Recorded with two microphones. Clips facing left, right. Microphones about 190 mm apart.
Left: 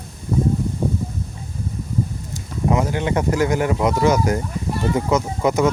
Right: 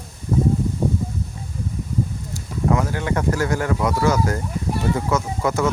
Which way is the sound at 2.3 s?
20° left (ahead or behind).